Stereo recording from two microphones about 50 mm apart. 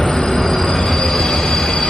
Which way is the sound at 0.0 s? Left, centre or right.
Centre.